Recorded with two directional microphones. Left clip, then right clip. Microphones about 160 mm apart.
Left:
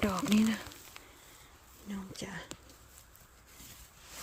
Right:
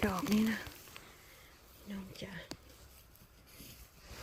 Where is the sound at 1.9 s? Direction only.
35° left (ahead or behind).